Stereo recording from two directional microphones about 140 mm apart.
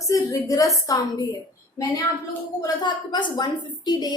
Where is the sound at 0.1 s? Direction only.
25° left (ahead or behind).